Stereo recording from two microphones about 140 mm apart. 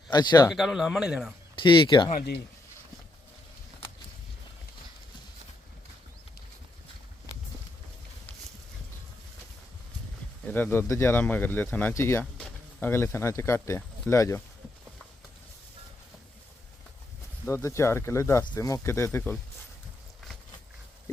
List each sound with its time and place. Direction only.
0.1 s speech: 30° left (ahead or behind)
0.5 s speech: centre (ahead or behind)
1.5 s speech: 35° left (ahead or behind)
10.4 s speech: 15° left (ahead or behind)
12.2 s a sound: 5° left (ahead or behind)
12.9 s speech: 15° left (ahead or behind)
17.4 s speech: 20° left (ahead or behind)